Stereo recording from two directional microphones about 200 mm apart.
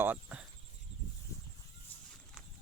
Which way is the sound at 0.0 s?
10° right (ahead or behind).